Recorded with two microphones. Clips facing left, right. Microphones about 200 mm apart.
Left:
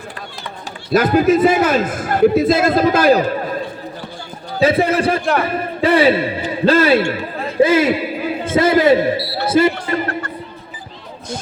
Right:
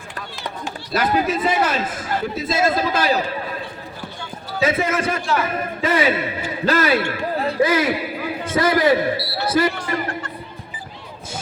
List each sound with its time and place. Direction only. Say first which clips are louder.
0.6 s speech: left 7 dB; 45° left (ahead or behind)
4.6 s a man's voice: left 6 dB; 30° left (ahead or behind)
9.5 s basketball bounce: left 5 dB; 25° left (ahead or behind)